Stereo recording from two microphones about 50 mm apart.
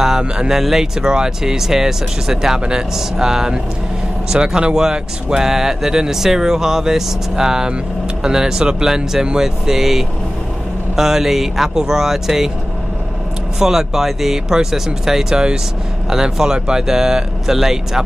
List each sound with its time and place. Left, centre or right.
0.2 s speech: centre
0.6 s speech: centre
13.6 s speech: centre